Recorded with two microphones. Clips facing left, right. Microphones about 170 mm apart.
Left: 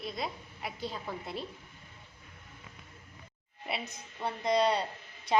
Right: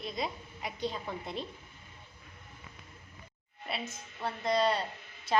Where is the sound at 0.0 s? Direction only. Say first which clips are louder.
Right 1 dB; centre (ahead or behind).